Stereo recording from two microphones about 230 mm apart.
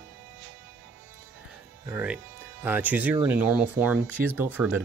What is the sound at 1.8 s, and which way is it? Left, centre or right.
Speech, centre.